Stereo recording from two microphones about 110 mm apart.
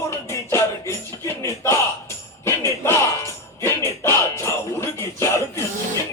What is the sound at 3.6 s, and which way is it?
Speech, 25° left (ahead or behind).